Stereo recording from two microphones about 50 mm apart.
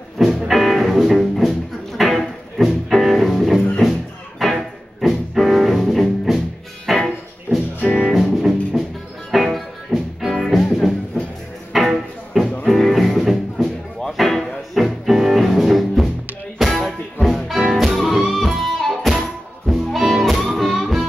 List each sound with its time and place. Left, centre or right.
0.5 s music: centre
4.4 s a sound: centre
5.0 s music: centre